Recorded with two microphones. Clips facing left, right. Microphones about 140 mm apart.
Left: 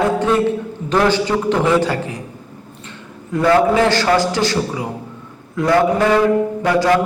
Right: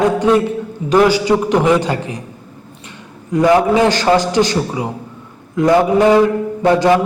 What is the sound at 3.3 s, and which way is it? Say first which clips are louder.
A man's voice: right 2 dB; 15° right (ahead or behind).